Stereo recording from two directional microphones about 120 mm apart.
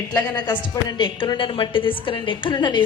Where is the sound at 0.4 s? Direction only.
40° left (ahead or behind).